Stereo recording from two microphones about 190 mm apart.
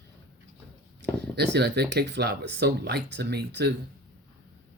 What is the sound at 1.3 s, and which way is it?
Speech, 65° right (ahead or behind).